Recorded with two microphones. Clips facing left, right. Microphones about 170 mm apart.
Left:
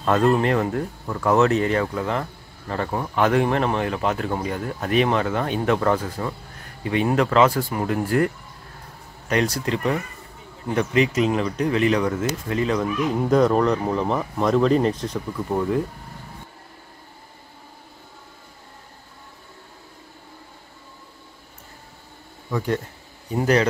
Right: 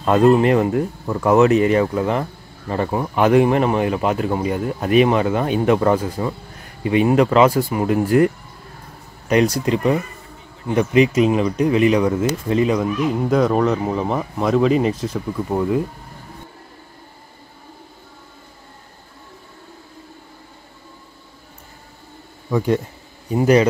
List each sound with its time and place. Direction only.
0.0 s speech: 15° right (ahead or behind)
9.3 s speech: 15° right (ahead or behind)
13.1 s speech: centre (ahead or behind)
22.5 s speech: 20° right (ahead or behind)